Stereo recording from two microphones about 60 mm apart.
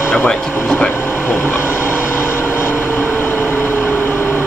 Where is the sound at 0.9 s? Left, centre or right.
Left.